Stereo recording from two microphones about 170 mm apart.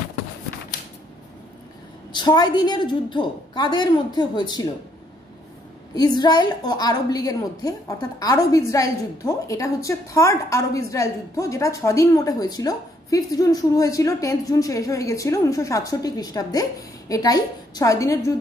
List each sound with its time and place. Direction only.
2.1 s a woman's voice: 25° left (ahead or behind)
5.9 s a woman's voice: 25° left (ahead or behind)